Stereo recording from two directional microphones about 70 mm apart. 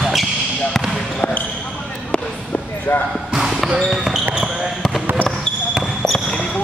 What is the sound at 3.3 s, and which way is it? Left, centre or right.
Basketball bounce, centre.